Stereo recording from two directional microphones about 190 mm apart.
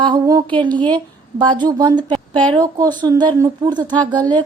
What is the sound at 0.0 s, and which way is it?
A woman's voice, 20° right (ahead or behind).